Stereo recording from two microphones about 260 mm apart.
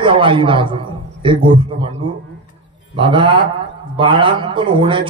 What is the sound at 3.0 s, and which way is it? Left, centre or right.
A man's voice, centre.